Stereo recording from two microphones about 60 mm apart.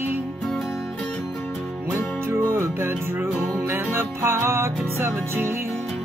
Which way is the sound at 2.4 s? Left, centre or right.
Right.